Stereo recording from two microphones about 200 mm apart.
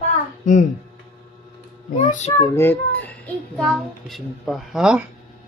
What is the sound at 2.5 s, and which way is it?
A child's voice, 10° left (ahead or behind).